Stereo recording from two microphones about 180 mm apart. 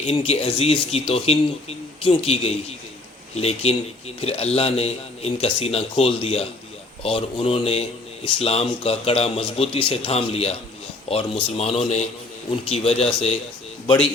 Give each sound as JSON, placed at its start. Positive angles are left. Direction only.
{"t": 0.0, "sound": "speech", "side_deg": 35}